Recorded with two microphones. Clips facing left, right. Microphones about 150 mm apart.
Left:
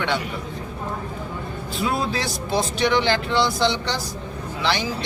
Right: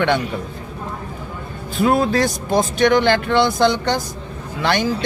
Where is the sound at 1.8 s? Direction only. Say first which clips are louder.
Right 8 dB; 55° right (ahead or behind).